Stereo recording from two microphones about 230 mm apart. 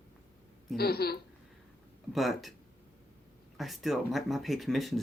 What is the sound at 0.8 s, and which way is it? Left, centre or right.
Speech, left.